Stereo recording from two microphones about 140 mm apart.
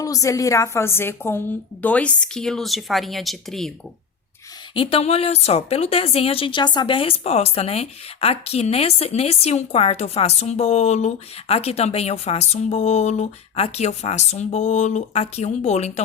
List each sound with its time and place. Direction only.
0.0 s a woman's voice: 25° left (ahead or behind); by 3.7 s centre (ahead or behind)
4.7 s speech: 40° left (ahead or behind)